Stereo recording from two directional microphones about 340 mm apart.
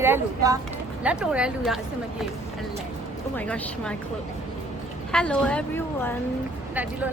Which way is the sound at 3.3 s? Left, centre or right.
Centre.